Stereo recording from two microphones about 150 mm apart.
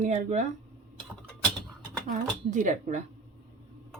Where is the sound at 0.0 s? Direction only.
50° right (ahead or behind).